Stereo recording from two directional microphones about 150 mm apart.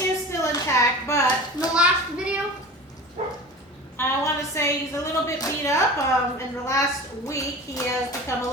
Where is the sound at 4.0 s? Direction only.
20° left (ahead or behind).